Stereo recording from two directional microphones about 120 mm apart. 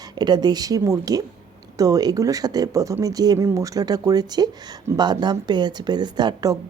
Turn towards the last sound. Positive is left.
turn(degrees=-35)  # may be behind; listen again after turning